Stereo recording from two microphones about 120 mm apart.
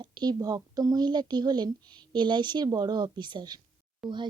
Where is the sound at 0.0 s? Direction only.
35° right (ahead or behind).